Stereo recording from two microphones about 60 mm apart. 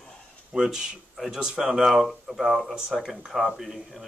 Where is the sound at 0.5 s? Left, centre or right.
Centre.